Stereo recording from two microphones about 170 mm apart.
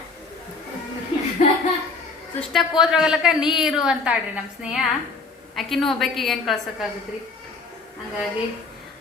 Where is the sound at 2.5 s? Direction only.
Centre (ahead or behind).